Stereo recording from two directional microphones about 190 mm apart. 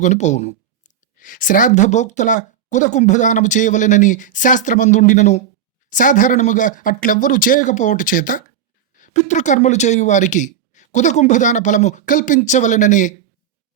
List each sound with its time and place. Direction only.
0.0 s speech: 40° left (ahead or behind)